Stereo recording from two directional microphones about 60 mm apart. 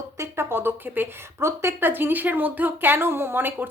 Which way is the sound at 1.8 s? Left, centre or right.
Right.